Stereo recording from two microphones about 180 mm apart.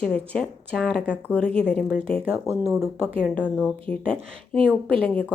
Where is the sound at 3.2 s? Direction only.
5° left (ahead or behind).